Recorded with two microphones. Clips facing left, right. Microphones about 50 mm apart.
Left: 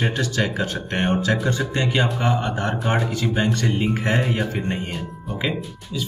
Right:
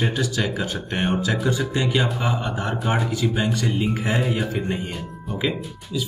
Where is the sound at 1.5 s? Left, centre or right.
Left.